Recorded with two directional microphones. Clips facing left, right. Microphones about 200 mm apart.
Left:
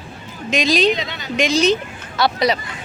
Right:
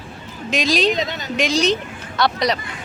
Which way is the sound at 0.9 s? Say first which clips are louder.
Right 1 dB; 45° right (ahead or behind).